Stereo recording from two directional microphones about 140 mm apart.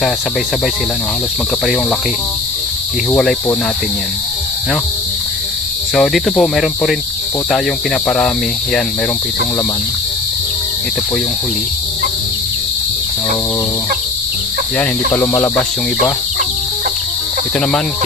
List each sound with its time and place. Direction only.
3.1 s cricket: 5° left (ahead or behind)
5.9 s cricket: centre (ahead or behind)
14.8 s cricket: 15° left (ahead or behind)